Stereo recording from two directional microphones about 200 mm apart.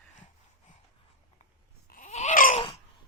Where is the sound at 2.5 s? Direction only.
25° left (ahead or behind).